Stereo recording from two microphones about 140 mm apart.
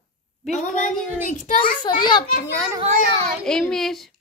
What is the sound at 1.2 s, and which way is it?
Speech, 65° left (ahead or behind).